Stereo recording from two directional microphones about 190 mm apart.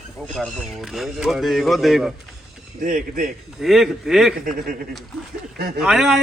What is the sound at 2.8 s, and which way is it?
Speech, 45° right (ahead or behind).